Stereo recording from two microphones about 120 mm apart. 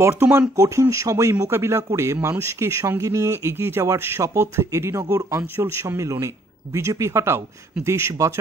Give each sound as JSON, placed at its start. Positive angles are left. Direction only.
{"t": 0.0, "sound": "a man's voice", "side_deg": -20}